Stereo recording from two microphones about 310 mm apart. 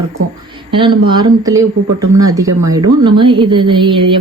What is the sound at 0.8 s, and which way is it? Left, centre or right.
A woman's voice, centre.